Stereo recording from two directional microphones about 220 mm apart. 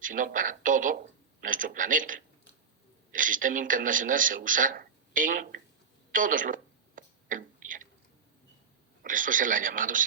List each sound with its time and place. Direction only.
0.0 s a man's voice: 40° right (ahead or behind)
6.1 s a sound: 35° right (ahead or behind)
9.0 s a man's voice: 40° right (ahead or behind)